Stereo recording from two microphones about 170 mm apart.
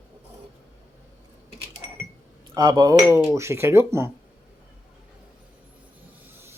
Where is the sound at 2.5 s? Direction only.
25° right (ahead or behind).